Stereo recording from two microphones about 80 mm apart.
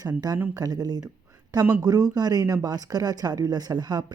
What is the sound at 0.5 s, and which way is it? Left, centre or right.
A woman's voice, right.